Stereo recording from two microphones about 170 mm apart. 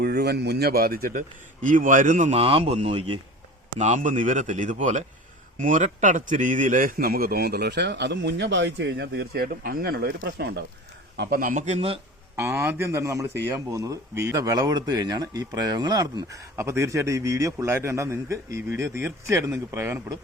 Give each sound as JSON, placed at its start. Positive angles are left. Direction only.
{"t": 0.0, "sound": "speech", "side_deg": -70}
{"t": 3.8, "sound": "a man's voice", "side_deg": -45}
{"t": 11.2, "sound": "speech", "side_deg": -60}
{"t": 12.4, "sound": "speech", "side_deg": -15}